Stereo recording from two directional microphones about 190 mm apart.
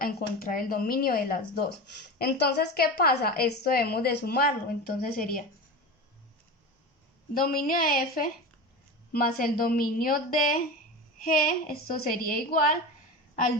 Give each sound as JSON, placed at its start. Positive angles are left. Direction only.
{"t": 0.0, "sound": "a woman's voice", "side_deg": 50}
{"t": 7.3, "sound": "a woman's voice", "side_deg": 50}